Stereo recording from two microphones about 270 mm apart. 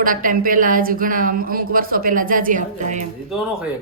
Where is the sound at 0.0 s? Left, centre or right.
Right.